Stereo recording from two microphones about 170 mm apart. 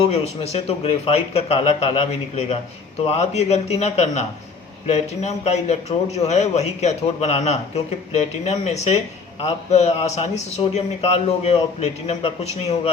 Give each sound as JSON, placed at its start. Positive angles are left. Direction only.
{"t": 0.0, "sound": "a man's voice", "side_deg": 35}